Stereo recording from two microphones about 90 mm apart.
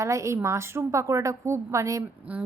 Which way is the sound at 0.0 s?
35° right (ahead or behind).